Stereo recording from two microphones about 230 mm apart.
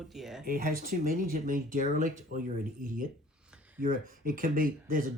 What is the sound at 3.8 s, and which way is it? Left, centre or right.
Speech, right.